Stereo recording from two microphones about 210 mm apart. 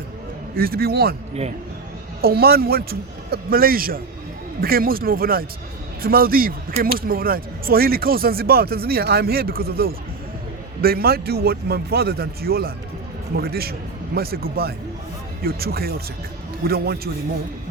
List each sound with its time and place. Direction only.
0.5 s speech: 45° right (ahead or behind)
2.2 s speech: 45° right (ahead or behind)